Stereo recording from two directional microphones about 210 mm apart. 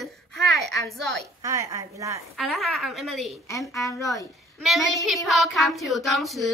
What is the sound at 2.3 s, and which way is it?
Child singing, centre (ahead or behind).